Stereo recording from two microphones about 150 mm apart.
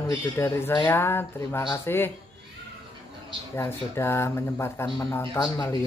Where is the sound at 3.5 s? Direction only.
15° left (ahead or behind).